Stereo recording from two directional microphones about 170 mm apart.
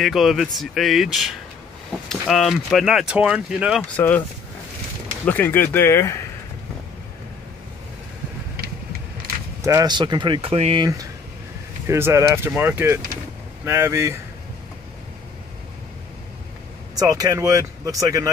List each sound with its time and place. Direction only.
0.0 s speech: centre (ahead or behind)
3.9 s speech: 10° left (ahead or behind)
5.2 s speech: 10° left (ahead or behind)
9.6 s speech: 20° right (ahead or behind)
11.9 s speech: 15° right (ahead or behind)
16.9 s speech: 20° right (ahead or behind)